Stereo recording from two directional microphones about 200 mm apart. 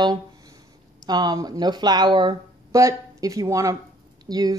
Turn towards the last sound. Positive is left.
turn(degrees=-20)  # may be behind; listen again after turning